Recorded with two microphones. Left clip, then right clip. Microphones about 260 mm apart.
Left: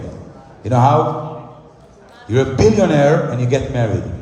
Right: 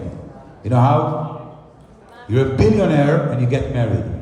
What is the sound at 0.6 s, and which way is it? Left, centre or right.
Speech, left.